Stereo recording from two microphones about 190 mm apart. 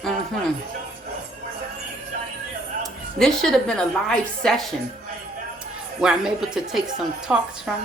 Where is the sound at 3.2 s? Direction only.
Centre (ahead or behind).